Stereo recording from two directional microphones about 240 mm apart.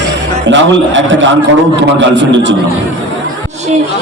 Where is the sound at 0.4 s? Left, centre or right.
Right.